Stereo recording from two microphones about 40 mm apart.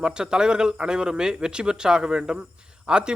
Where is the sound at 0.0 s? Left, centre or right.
Right.